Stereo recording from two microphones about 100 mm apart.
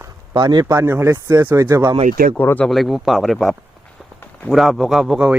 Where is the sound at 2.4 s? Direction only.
20° left (ahead or behind).